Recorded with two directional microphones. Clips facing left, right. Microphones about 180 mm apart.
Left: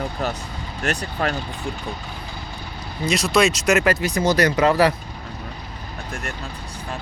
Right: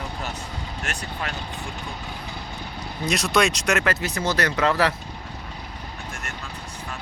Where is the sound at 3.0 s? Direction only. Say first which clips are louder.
Left 3 dB; centre (ahead or behind).